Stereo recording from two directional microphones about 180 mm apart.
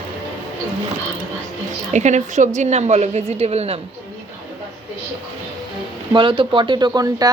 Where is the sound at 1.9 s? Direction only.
40° right (ahead or behind).